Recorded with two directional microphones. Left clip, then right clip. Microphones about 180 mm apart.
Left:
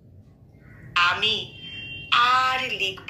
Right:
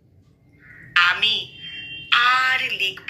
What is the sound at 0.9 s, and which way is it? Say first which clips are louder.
A woman's voice: right 3 dB; 10° left (ahead or behind).